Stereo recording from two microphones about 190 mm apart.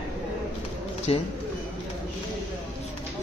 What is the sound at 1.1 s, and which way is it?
Speech, 30° left (ahead or behind).